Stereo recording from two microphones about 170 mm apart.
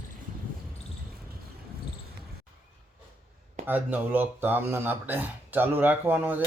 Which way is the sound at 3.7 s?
10° right (ahead or behind).